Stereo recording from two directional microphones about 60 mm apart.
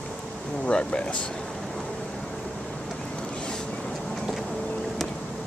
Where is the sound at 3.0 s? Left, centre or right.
Centre.